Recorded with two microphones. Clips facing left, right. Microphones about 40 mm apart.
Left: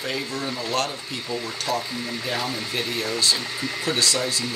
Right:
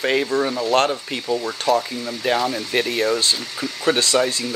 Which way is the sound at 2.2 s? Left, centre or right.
Right.